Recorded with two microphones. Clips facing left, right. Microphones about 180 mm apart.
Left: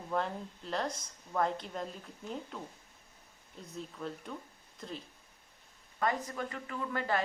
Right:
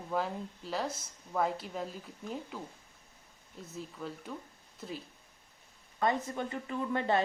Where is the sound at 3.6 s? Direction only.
5° right (ahead or behind).